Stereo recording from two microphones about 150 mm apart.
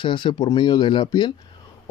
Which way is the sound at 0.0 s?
35° left (ahead or behind).